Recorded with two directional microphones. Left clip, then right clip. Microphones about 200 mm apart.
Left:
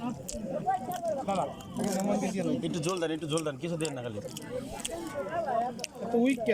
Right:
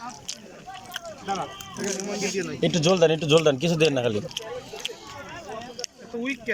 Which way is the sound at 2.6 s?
45° right (ahead or behind).